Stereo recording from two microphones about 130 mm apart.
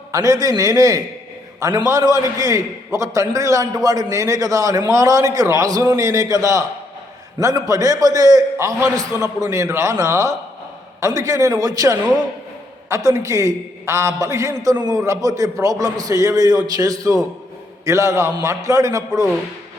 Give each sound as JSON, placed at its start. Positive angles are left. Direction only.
{"t": 0.1, "sound": "a man's voice", "side_deg": -25}